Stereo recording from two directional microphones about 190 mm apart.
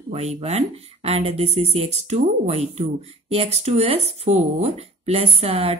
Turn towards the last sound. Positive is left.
turn(degrees=-30)  # may be behind; listen again after turning